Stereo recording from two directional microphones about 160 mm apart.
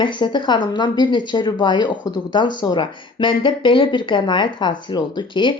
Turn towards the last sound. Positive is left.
turn(degrees=30)  # may be behind; listen again after turning